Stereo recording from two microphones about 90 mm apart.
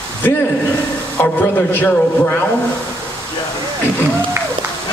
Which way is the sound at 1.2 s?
20° left (ahead or behind).